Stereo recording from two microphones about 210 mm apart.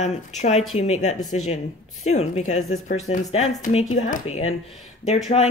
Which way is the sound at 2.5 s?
90° left.